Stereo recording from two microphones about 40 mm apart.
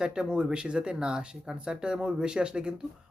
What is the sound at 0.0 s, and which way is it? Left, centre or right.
Speech, right.